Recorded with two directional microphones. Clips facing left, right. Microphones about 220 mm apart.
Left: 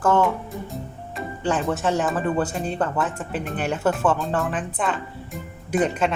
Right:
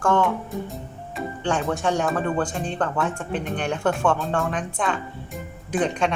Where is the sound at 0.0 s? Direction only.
5° left (ahead or behind).